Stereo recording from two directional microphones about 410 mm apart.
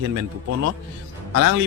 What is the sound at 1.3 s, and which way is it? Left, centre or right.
Speech, right.